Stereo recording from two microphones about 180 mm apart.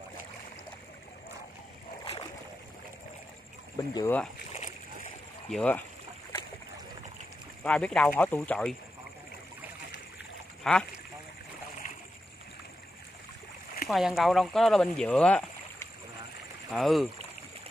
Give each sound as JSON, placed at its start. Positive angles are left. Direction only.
{"t": 3.7, "sound": "speech", "side_deg": 20}
{"t": 5.5, "sound": "speech", "side_deg": 5}
{"t": 7.6, "sound": "speech", "side_deg": 5}
{"t": 10.6, "sound": "speech", "side_deg": 5}
{"t": 13.8, "sound": "speech", "side_deg": 0}